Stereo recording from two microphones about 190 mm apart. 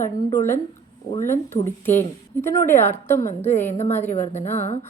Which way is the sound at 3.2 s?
35° left (ahead or behind).